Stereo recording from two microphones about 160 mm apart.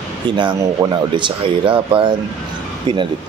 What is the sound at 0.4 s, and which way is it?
Speech, 25° right (ahead or behind).